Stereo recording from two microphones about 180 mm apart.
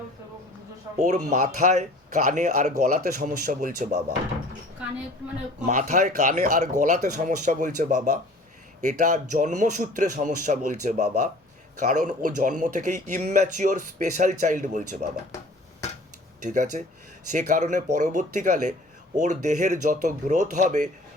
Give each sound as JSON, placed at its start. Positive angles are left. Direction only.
{"t": 0.9, "sound": "a man's voice", "side_deg": -40}
{"t": 5.5, "sound": "a man's voice", "side_deg": -40}
{"t": 16.4, "sound": "a man's voice", "side_deg": -45}